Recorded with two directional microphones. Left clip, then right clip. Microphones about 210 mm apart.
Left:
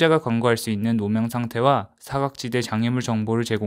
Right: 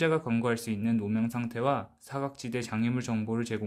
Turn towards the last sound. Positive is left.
turn(degrees=40)  # may be behind; listen again after turning